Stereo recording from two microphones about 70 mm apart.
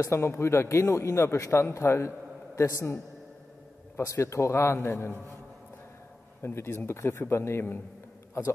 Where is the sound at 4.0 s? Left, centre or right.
Left.